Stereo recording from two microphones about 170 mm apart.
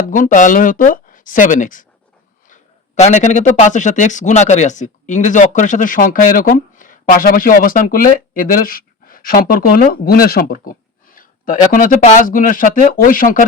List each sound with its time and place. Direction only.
0.1 s speech: 50° left (ahead or behind)